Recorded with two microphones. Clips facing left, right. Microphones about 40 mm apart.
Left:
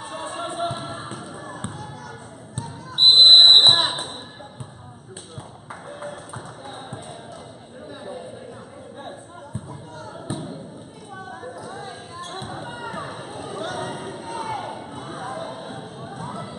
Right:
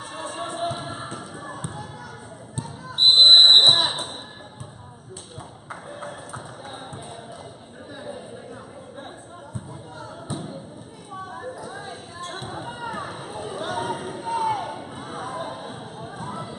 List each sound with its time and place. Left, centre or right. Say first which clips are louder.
0.0 s music: left 1 dB; centre
0.6 s music: even; centre
1.1 s basketball bounce: even; centre
3.0 s a sound: left 1 dB; centre
3.6 s basketball bounce: left 1 dB; centre
5.7 s a sound: left 1 dB; centre
10.3 s basketball bounce: left 2 dB; centre
11.6 s basketball bounce: left 1 dB; centre